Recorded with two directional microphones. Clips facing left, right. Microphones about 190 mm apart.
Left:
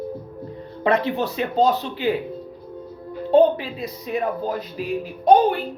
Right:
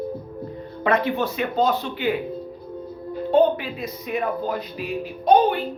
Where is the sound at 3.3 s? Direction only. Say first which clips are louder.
Left 2 dB; 30° left (ahead or behind).